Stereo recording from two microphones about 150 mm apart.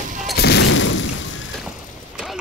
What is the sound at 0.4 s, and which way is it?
Fusillade, 90° left.